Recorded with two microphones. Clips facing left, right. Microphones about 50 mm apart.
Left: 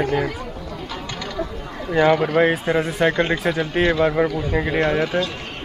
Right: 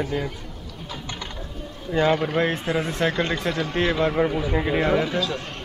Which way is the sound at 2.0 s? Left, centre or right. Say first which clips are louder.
Left 4 dB; left.